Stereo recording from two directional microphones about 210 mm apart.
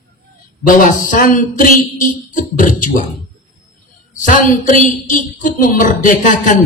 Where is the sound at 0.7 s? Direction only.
40° left (ahead or behind).